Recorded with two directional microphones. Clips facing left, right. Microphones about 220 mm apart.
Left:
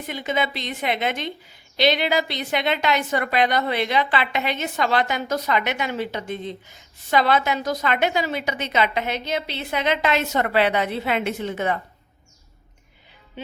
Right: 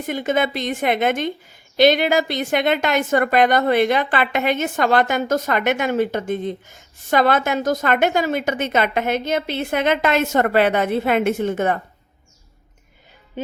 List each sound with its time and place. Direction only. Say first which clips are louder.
0.0 s a woman's voice: right 5 dB; 50° right (ahead or behind)
13.4 s music: right 7 dB; 45° right (ahead or behind)